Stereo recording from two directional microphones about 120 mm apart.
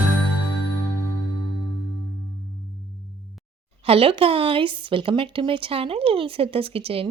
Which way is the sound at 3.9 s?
50° right (ahead or behind).